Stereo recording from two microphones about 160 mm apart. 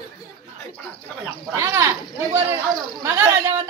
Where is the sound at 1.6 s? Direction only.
15° right (ahead or behind).